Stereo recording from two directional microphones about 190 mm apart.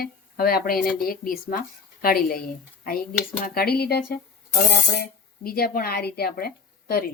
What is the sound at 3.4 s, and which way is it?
Speech, 55° left (ahead or behind).